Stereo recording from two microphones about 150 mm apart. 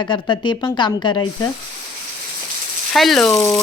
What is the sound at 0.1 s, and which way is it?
Speech, 30° left (ahead or behind).